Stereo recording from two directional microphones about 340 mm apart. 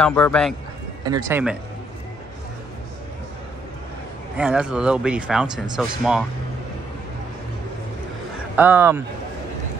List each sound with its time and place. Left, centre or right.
0.0 s speech: centre
1.0 s speech: centre
4.4 s speech: centre
8.5 s speech: centre